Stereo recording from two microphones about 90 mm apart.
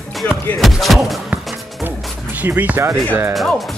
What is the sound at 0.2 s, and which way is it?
Speech, 20° left (ahead or behind).